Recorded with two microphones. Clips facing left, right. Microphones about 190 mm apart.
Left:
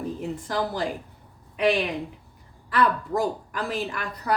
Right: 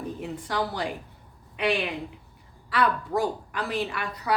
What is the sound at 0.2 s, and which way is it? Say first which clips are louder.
A woman's voice: even; 45° left (ahead or behind).